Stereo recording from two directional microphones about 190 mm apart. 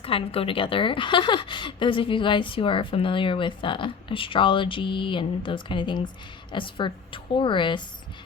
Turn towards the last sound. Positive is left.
turn(degrees=25)  # may be behind; listen again after turning